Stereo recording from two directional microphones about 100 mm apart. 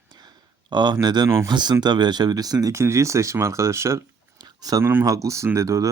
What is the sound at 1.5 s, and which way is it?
Speech, 45° right (ahead or behind).